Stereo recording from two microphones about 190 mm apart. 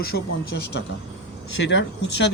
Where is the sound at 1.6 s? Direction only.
70° left (ahead or behind).